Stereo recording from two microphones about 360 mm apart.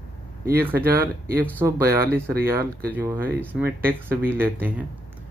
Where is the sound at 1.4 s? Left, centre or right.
Centre.